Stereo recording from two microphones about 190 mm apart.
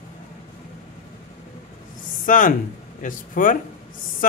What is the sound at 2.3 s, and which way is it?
Speech, 45° left (ahead or behind).